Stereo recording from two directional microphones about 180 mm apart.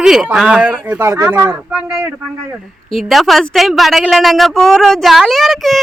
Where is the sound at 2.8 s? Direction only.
Centre (ahead or behind).